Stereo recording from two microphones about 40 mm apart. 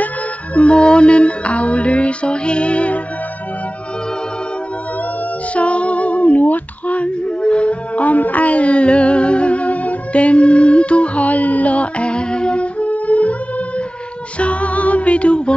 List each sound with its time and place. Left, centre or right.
0.6 s music: left
5.5 s female singing: left
14.4 s music: left